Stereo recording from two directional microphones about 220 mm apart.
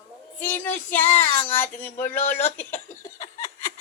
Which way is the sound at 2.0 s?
35° left (ahead or behind).